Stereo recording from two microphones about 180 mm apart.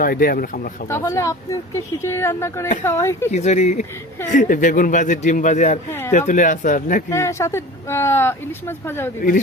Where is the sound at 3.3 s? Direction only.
40° left (ahead or behind).